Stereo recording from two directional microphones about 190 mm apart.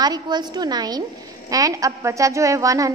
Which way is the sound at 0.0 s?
20° right (ahead or behind).